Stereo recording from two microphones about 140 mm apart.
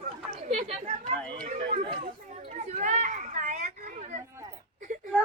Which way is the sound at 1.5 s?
40° right (ahead or behind).